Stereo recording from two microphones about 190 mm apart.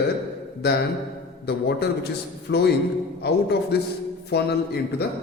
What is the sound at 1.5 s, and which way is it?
Speech, 60° left (ahead or behind).